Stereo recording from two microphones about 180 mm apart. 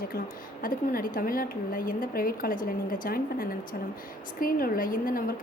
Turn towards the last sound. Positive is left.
turn(degrees=50)  # may be behind; listen again after turning